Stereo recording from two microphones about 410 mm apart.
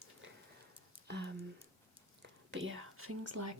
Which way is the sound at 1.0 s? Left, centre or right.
Right.